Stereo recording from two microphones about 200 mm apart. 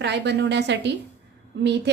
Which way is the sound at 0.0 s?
60° right (ahead or behind).